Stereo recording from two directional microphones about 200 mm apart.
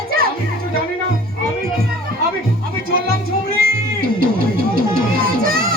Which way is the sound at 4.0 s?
45° right (ahead or behind).